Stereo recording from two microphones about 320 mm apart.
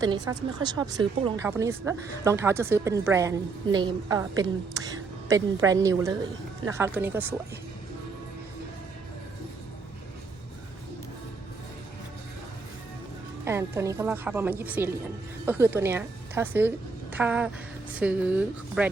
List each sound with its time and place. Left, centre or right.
0.0 s speech: centre
13.4 s a woman's voice: centre